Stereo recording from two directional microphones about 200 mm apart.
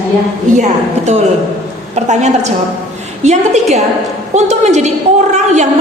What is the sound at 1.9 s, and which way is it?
A woman's voice, 35° right (ahead or behind).